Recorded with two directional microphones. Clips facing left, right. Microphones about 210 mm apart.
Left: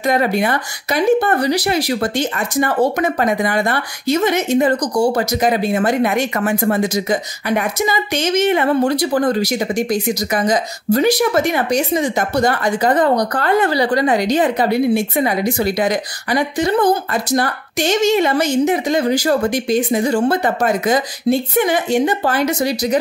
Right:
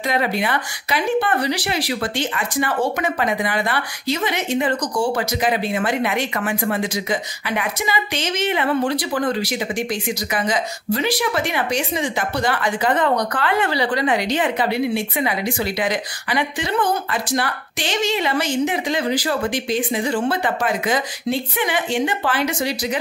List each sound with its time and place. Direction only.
0.0 s speech: 45° left (ahead or behind)